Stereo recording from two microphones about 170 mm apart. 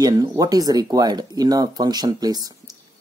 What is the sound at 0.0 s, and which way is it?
Speech, 20° right (ahead or behind).